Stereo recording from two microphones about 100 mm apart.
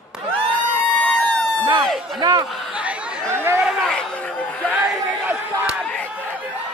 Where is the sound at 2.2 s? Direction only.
35° right (ahead or behind).